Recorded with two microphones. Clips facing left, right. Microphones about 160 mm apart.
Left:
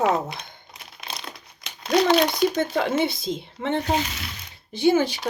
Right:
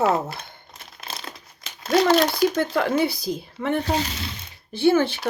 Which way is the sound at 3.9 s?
35° right (ahead or behind).